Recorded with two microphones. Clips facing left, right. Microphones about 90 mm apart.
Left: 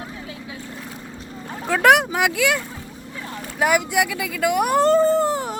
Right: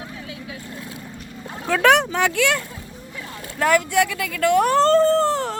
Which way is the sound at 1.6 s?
5° left (ahead or behind).